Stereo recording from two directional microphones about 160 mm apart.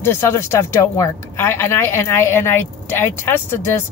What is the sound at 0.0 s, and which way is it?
Speech, 15° left (ahead or behind).